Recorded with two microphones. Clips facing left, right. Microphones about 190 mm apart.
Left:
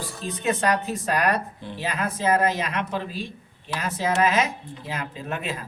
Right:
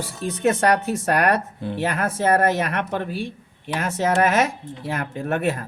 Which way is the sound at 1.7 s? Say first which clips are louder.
Right 4 dB; 50° right (ahead or behind).